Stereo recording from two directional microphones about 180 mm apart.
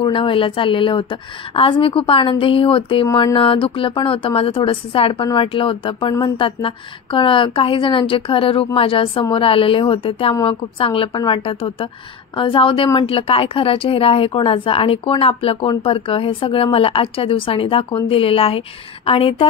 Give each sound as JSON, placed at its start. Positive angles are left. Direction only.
{"t": 0.0, "sound": "a woman's voice", "side_deg": 30}
{"t": 3.1, "sound": "speech", "side_deg": 20}
{"t": 3.3, "sound": "a woman's voice", "side_deg": 30}